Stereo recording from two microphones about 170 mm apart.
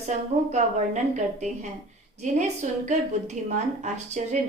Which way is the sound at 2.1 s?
45° right (ahead or behind).